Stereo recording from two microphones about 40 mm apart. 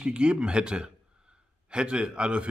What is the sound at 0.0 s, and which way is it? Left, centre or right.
Speech, right.